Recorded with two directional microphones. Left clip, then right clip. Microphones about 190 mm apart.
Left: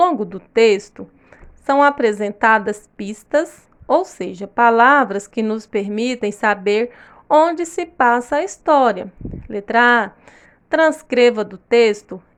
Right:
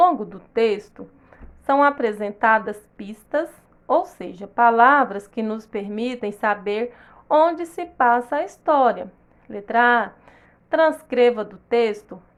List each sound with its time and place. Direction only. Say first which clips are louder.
0.0 s a woman's voice: left 1 dB; 30° left (ahead or behind)